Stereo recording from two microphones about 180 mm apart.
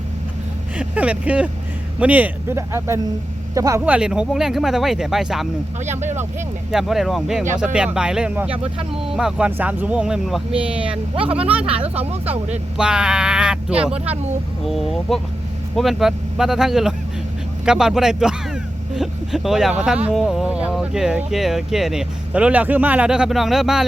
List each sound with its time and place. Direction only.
0.8 s speech: 5° right (ahead or behind)
6.7 s speech: centre (ahead or behind)
11.9 s speech: 35° right (ahead or behind)
12.7 s speech: 5° right (ahead or behind)